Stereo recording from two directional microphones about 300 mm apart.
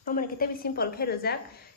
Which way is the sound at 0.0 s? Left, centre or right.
Left.